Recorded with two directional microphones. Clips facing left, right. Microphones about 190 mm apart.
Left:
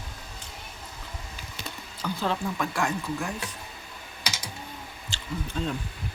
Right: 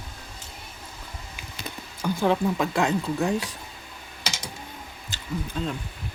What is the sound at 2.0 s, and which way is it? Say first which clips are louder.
Speech: right 6 dB; 10° right (ahead or behind).